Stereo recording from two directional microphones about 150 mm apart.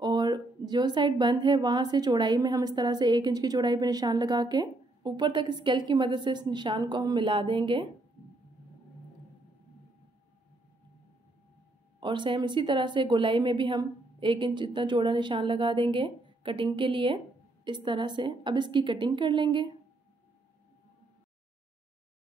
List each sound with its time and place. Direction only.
0.0 s a woman's voice: 30° right (ahead or behind)
12.0 s a woman's voice: 30° right (ahead or behind)